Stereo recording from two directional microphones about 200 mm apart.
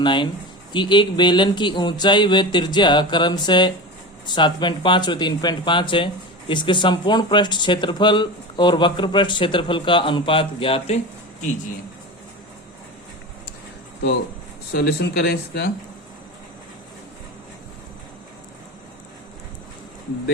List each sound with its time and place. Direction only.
0.0 s speech: 25° left (ahead or behind)
14.7 s speech: 55° left (ahead or behind)